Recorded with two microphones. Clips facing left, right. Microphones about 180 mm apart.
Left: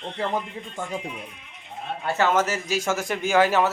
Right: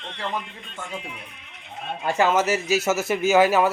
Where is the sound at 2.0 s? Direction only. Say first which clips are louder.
Right 2 dB; 15° right (ahead or behind).